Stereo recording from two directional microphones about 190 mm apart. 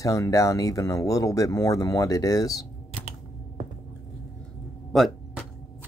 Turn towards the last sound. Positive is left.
turn(degrees=0)  # may be behind; listen again after turning